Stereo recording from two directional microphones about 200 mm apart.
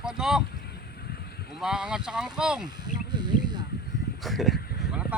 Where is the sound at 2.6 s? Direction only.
20° right (ahead or behind).